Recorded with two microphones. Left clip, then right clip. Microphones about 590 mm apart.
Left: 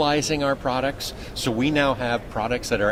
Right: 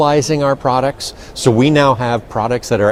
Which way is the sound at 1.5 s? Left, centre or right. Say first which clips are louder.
Right 9 dB; right.